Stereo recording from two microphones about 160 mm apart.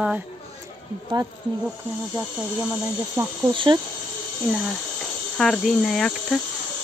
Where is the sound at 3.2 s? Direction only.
15° right (ahead or behind).